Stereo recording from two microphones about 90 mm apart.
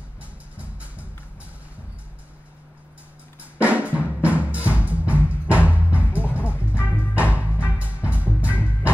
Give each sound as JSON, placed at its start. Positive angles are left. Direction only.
{"t": 0.2, "sound": "music", "side_deg": -15}
{"t": 3.5, "sound": "drum", "side_deg": -15}
{"t": 6.3, "sound": "music", "side_deg": -15}